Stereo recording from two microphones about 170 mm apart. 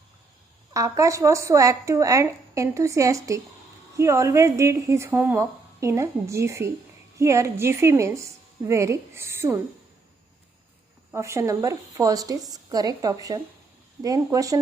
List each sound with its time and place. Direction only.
0.7 s speech: 20° right (ahead or behind)
11.1 s speech: 15° right (ahead or behind)